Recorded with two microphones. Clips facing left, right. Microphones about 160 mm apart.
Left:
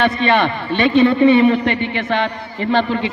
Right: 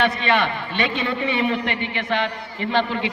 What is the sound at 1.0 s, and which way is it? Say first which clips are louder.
Speech: left 14 dB; 50° left (ahead or behind).